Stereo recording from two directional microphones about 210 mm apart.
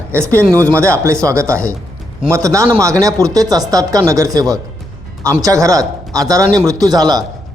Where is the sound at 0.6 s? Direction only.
10° right (ahead or behind).